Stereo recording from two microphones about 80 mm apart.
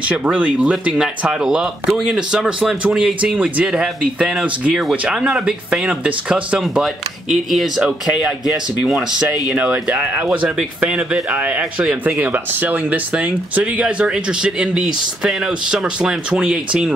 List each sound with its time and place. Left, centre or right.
0.1 s speech: centre